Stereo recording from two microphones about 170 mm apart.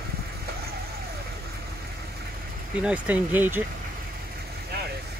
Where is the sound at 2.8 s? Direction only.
10° right (ahead or behind).